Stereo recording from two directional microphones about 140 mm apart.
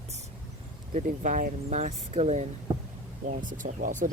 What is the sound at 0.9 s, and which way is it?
Speech, 65° right (ahead or behind).